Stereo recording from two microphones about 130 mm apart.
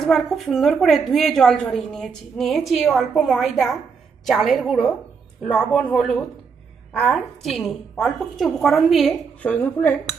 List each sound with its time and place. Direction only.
0.0 s a woman's voice: centre (ahead or behind)
9.4 s a woman's voice: 15° left (ahead or behind)